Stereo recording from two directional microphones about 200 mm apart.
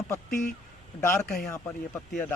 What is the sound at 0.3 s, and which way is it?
Speech, 40° left (ahead or behind).